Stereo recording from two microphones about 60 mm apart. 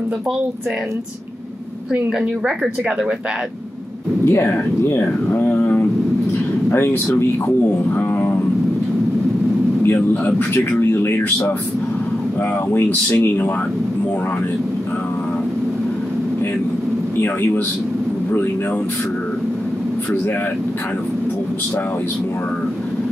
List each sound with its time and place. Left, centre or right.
2.1 s speech: centre
4.3 s speech: left
5.0 s speech: left
6.7 s speech: left
10.5 s speech: left
12.7 s speech: left